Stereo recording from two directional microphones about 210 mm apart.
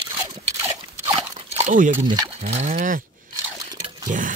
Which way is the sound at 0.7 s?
15° right (ahead or behind).